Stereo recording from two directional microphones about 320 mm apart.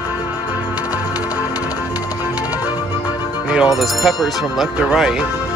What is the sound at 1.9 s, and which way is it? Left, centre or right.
Music, centre.